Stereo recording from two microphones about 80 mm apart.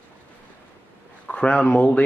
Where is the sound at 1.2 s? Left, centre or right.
Centre.